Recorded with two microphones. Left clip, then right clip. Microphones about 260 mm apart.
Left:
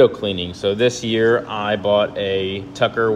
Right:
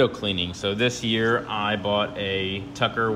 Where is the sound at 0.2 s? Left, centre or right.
Centre.